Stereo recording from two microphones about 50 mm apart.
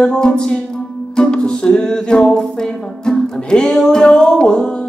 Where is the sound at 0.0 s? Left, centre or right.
Centre.